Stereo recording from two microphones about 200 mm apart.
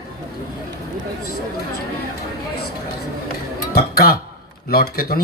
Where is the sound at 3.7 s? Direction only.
50° left (ahead or behind).